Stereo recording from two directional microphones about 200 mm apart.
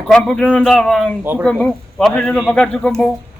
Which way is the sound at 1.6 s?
5° left (ahead or behind).